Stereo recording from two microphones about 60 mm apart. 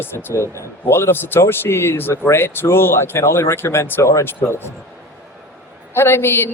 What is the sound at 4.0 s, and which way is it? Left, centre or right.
Speech, left.